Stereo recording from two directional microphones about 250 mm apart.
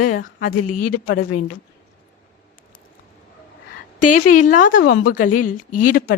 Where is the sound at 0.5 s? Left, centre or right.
Left.